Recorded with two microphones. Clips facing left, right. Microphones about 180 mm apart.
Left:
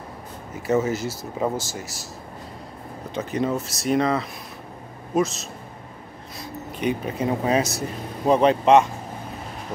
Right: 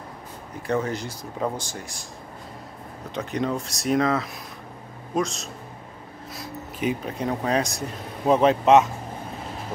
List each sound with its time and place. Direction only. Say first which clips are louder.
0.6 s speech: left 4 dB; 5° left (ahead or behind)
3.2 s speech: left 2 dB; centre (ahead or behind)